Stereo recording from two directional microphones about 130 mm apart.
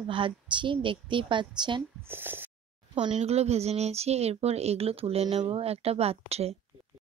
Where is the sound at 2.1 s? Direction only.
15° right (ahead or behind).